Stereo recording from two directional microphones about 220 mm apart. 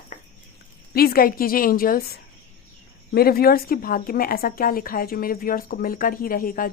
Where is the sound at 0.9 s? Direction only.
45° left (ahead or behind).